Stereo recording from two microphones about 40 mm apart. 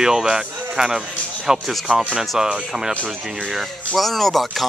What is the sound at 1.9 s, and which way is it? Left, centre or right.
Speech, left.